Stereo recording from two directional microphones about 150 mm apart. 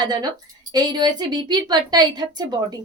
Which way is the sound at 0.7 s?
30° right (ahead or behind).